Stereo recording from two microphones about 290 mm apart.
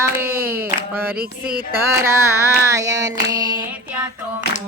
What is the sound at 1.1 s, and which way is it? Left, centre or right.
Speech, right.